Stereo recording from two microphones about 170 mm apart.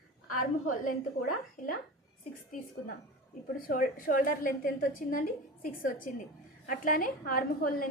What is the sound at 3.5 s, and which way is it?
A woman's voice, 55° left (ahead or behind).